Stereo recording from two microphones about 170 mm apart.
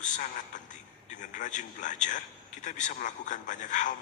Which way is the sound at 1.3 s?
45° left (ahead or behind).